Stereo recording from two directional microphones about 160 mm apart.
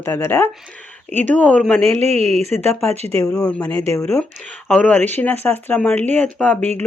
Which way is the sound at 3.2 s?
20° left (ahead or behind).